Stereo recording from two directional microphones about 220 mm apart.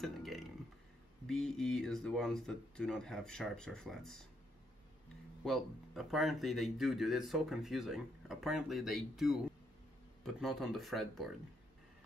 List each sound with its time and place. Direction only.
0.0 s a sound: centre (ahead or behind)
1.2 s speech: centre (ahead or behind)
5.4 s speech: centre (ahead or behind)